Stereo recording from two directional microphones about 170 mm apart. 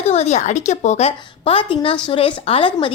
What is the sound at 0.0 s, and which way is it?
A woman's voice, 40° left (ahead or behind).